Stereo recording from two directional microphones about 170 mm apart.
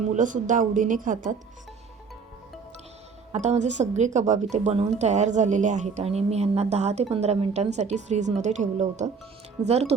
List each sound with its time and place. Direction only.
0.1 s speech: 50° right (ahead or behind)
3.3 s speech: 40° right (ahead or behind)